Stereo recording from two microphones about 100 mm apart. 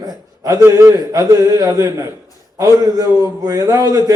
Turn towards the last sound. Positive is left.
turn(degrees=-35)  # may be behind; listen again after turning